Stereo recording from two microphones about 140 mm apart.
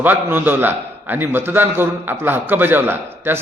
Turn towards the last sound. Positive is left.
turn(degrees=-15)  # may be behind; listen again after turning